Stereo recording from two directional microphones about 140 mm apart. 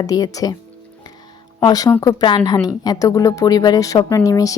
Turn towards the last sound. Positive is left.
turn(degrees=25)  # may be behind; listen again after turning